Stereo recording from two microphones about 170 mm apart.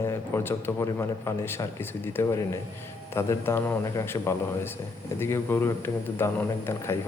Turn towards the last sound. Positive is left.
turn(degrees=15)  # may be behind; listen again after turning